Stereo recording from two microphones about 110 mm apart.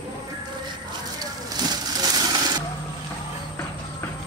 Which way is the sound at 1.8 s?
35° right (ahead or behind).